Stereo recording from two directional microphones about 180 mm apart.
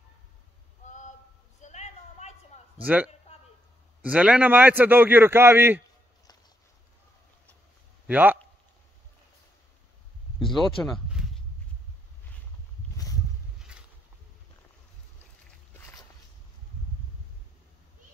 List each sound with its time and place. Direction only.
0.8 s a sound: 45° left (ahead or behind)
2.8 s a man's voice: 10° right (ahead or behind)
8.1 s a man's voice: 10° right (ahead or behind)
10.8 s speech: centre (ahead or behind)